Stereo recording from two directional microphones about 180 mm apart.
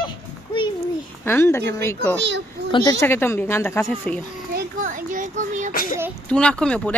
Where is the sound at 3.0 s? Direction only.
15° left (ahead or behind).